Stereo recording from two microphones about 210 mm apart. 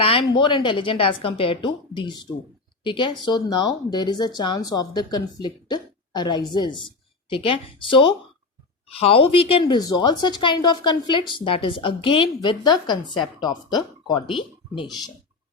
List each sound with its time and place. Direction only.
0.0 s speech: 25° left (ahead or behind)